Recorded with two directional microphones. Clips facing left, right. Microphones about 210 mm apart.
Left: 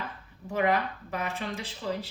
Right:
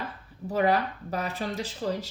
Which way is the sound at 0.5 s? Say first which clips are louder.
Right 2 dB; 35° right (ahead or behind).